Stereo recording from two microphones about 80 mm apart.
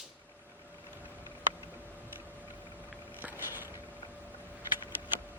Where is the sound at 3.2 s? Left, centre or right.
Right.